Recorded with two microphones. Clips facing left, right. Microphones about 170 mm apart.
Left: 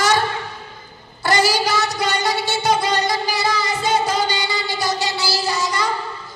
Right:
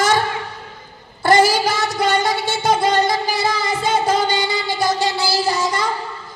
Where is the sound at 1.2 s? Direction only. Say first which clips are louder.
Right 4 dB; 50° right (ahead or behind).